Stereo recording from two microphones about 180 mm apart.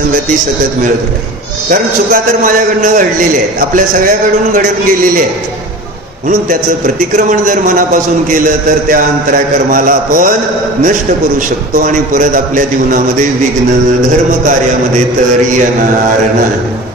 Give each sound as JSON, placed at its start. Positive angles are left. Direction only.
{"t": 7.2, "sound": "a man's voice", "side_deg": -45}
{"t": 11.7, "sound": "a man's voice", "side_deg": -45}